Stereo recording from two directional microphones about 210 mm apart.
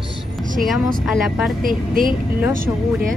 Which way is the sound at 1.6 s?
40° right (ahead or behind).